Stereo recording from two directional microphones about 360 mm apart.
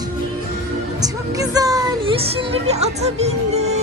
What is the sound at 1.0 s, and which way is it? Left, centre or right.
Music, centre.